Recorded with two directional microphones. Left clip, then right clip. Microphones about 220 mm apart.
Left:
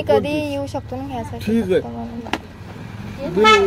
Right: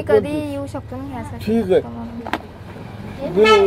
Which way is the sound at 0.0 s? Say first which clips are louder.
Even; 25° left (ahead or behind).